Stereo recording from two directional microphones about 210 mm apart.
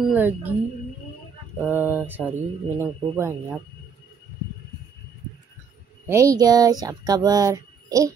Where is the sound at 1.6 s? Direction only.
10° right (ahead or behind).